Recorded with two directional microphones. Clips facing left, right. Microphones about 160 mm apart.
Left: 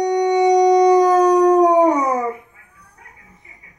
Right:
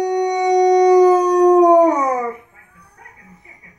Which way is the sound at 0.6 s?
5° right (ahead or behind).